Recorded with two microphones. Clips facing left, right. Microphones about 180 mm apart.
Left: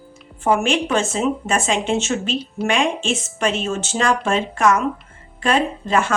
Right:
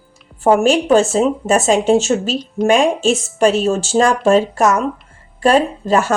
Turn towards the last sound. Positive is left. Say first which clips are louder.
# right 4 dB
turn(degrees=-40)  # may be behind; listen again after turning